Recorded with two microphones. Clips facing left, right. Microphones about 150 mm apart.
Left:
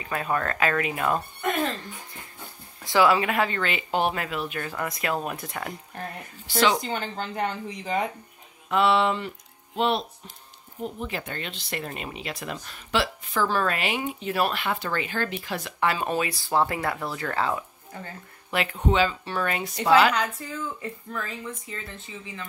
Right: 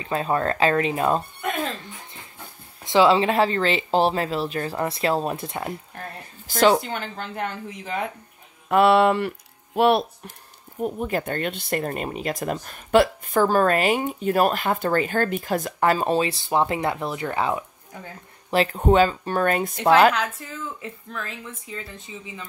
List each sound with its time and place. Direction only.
0.0 s speech: 25° right (ahead or behind)
2.8 s speech: 25° right (ahead or behind)
6.8 s speech: centre (ahead or behind)
8.6 s speech: 55° right (ahead or behind)
10.8 s speech: 45° right (ahead or behind); by 17.6 s 20° right (ahead or behind)
18.5 s speech: 35° right (ahead or behind); by 20.2 s 50° right (ahead or behind)
20.2 s speech: 5° right (ahead or behind)
21.9 s speech: 15° right (ahead or behind)